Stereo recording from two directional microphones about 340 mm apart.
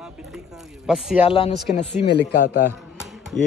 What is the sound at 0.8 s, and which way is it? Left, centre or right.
Speech, centre.